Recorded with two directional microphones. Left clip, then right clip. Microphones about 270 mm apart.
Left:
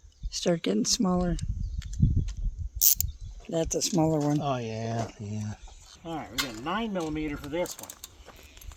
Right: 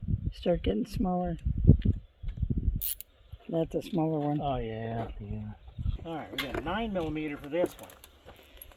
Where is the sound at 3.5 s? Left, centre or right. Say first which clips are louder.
Left 4 dB; centre.